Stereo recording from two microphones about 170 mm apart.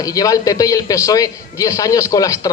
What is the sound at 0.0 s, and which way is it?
A man's voice, 20° left (ahead or behind).